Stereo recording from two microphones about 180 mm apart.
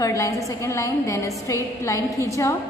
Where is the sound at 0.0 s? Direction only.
15° left (ahead or behind).